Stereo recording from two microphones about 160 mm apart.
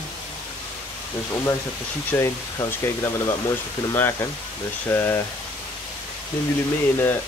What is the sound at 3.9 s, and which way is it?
Frying, 15° left (ahead or behind).